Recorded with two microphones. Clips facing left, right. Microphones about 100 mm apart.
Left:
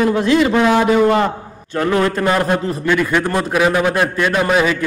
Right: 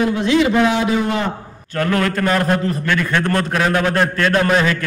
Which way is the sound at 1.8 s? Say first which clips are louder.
Left 2 dB; 20° left (ahead or behind).